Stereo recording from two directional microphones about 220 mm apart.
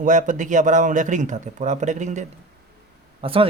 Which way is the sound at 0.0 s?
35° right (ahead or behind).